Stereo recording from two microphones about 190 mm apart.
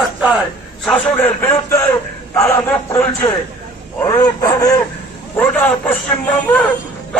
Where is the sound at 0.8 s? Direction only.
5° left (ahead or behind).